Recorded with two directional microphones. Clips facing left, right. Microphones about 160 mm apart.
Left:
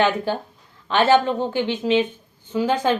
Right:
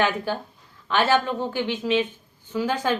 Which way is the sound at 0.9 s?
25° left (ahead or behind).